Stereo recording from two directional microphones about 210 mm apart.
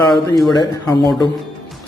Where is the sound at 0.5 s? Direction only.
20° left (ahead or behind).